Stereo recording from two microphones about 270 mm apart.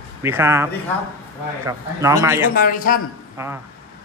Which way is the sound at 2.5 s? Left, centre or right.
Left.